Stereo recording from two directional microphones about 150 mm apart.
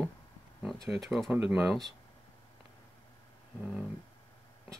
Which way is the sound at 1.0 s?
5° right (ahead or behind).